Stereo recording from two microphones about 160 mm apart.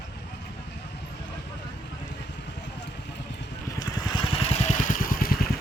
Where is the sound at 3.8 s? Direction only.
25° left (ahead or behind); by 5.3 s 60° left (ahead or behind).